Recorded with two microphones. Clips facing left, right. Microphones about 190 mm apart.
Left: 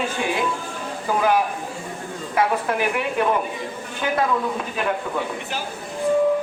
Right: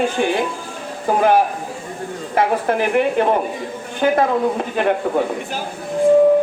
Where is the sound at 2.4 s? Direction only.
45° right (ahead or behind).